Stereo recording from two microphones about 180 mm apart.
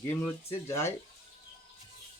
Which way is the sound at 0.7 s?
15° left (ahead or behind).